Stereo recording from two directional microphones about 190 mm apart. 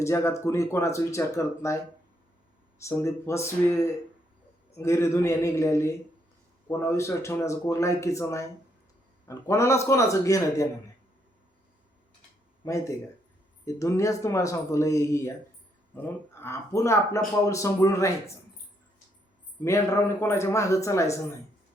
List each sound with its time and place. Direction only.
0.0 s speech: 15° left (ahead or behind)
13.7 s speech: 15° left (ahead or behind)
19.6 s speech: 15° left (ahead or behind)